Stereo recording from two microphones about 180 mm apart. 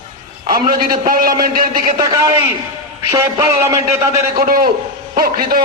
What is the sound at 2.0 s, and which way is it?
A man's voice, 20° right (ahead or behind).